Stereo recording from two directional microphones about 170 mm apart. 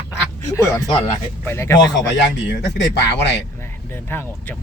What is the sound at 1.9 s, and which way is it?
Speech, 90° left.